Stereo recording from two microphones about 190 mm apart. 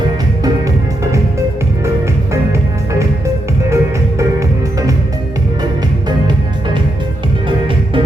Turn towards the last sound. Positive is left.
turn(degrees=-25)  # may be behind; listen again after turning